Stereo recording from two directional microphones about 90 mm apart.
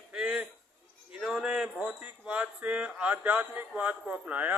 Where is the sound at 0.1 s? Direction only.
10° right (ahead or behind).